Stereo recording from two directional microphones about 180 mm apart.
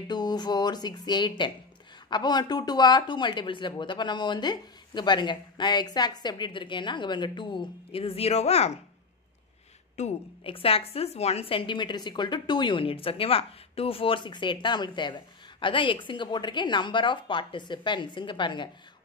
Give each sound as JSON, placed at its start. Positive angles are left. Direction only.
{"t": 0.1, "sound": "a woman's voice", "side_deg": 25}
{"t": 9.9, "sound": "a woman's voice", "side_deg": 35}